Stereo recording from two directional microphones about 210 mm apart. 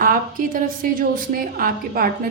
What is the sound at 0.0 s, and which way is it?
Speech, 40° right (ahead or behind).